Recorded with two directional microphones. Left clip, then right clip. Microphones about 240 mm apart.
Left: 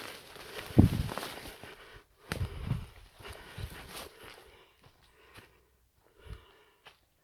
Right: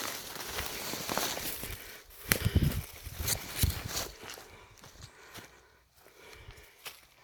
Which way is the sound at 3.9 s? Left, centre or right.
Right.